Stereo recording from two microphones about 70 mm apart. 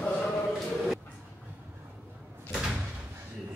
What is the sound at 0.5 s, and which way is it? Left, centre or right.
Music, centre.